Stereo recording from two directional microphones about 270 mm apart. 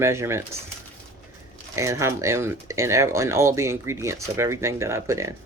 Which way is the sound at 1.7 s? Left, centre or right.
Centre.